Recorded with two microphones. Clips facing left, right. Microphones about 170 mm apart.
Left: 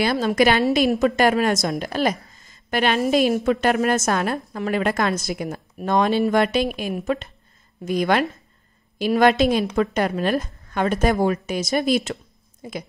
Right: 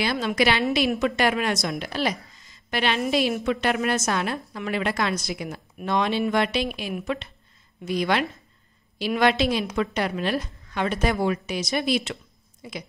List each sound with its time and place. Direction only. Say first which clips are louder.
0.0 s a woman's voice: left 5 dB; 45° left (ahead or behind)